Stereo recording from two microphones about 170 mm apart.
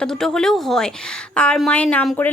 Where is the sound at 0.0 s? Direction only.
5° left (ahead or behind).